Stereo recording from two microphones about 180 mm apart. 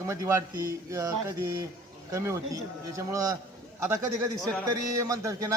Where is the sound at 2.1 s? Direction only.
15° right (ahead or behind).